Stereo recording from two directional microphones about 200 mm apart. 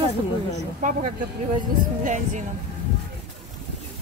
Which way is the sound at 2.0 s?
40° right (ahead or behind).